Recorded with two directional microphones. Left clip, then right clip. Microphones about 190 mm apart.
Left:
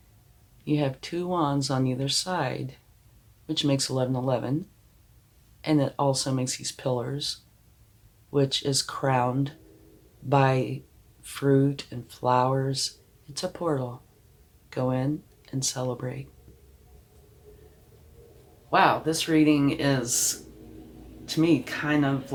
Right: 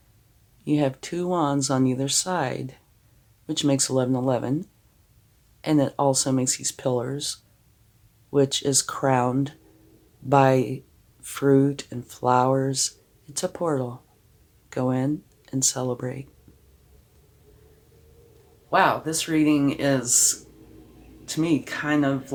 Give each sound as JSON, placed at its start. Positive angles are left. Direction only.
{"t": 0.6, "sound": "speech", "side_deg": -40}
{"t": 5.6, "sound": "speech", "side_deg": -40}
{"t": 18.7, "sound": "speech", "side_deg": -40}